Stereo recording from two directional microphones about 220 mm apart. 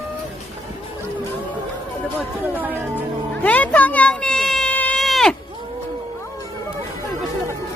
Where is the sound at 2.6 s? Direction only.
10° right (ahead or behind).